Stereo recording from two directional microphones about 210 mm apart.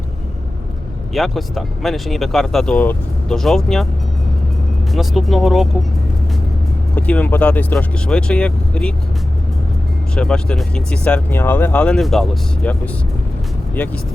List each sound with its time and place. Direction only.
1.1 s speech: centre (ahead or behind)
4.9 s speech: centre (ahead or behind)
6.9 s speech: 5° left (ahead or behind)
10.2 s speech: 5° left (ahead or behind)